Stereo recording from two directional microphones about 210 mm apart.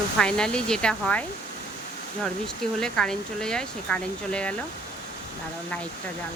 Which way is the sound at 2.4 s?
5° left (ahead or behind).